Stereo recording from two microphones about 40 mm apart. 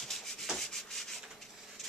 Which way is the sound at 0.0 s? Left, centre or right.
Centre.